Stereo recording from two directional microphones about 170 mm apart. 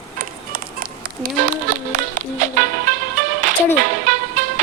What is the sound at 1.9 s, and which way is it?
Music, 45° right (ahead or behind).